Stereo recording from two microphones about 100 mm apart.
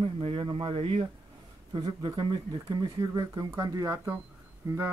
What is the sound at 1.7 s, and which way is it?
Speech, 45° right (ahead or behind).